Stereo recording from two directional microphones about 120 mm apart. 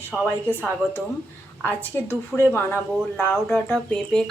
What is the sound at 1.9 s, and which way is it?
Speech, 20° left (ahead or behind).